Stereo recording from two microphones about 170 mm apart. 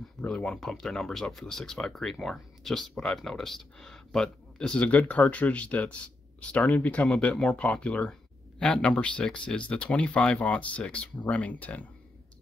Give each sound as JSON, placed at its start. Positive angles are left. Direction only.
{"t": 0.2, "sound": "speech", "side_deg": 5}